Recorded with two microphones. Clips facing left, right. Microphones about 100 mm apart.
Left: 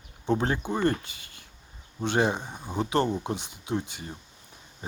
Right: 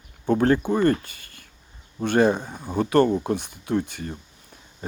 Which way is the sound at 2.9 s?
50° right (ahead or behind).